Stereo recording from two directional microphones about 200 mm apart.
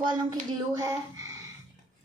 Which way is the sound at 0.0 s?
20° right (ahead or behind).